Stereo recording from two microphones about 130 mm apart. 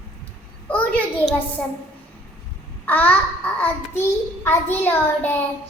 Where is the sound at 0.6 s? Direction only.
10° left (ahead or behind).